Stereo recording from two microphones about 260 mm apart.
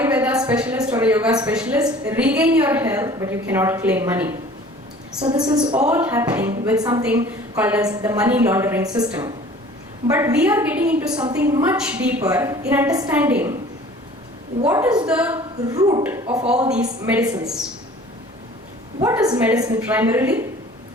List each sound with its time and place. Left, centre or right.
0.0 s a sound: centre
1.5 s a woman's voice: centre
5.7 s music: centre
6.7 s a woman's voice: centre
10.1 s a woman's voice: centre
14.7 s a woman's voice: centre
15.0 s music: centre
15.4 s a woman's voice: centre
16.5 s music: centre
16.8 s a woman's voice: centre
19.0 s a woman's voice: centre